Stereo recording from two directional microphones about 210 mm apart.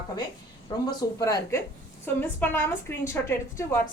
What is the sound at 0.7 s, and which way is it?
A woman's voice, 20° left (ahead or behind).